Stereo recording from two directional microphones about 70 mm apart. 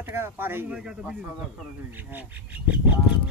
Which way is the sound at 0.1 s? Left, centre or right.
Right.